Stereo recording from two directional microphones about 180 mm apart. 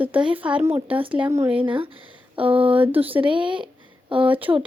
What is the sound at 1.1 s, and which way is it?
Speech, 10° right (ahead or behind).